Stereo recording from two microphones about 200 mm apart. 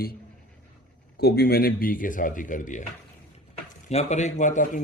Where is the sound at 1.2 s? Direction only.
50° left (ahead or behind).